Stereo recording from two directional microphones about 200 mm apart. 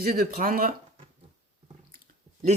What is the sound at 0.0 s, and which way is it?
Speech, 45° right (ahead or behind).